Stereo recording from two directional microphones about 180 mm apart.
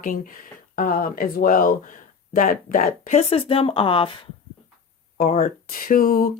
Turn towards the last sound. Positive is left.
turn(degrees=50)  # may be behind; listen again after turning